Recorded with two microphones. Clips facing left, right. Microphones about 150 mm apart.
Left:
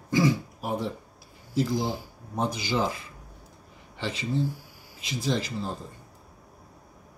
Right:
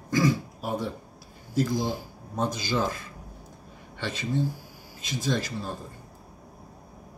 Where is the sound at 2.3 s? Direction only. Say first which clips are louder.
Even; 15° left (ahead or behind).